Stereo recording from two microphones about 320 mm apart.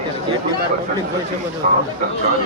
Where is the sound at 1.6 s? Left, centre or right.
Right.